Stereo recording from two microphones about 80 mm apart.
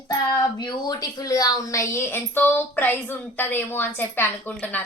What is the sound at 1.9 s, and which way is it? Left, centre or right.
A woman's voice, left.